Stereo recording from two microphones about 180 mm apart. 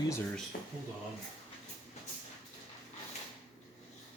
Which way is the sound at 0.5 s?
55° left (ahead or behind).